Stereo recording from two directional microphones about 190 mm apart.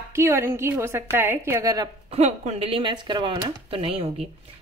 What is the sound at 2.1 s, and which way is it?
Speech, 35° right (ahead or behind).